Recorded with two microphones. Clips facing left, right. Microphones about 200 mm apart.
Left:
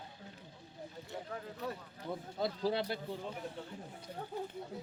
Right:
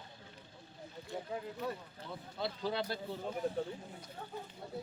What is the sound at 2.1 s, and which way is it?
Speech, 45° left (ahead or behind).